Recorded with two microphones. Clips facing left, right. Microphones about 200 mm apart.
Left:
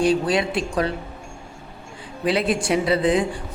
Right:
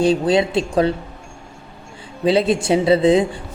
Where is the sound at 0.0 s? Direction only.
25° right (ahead or behind).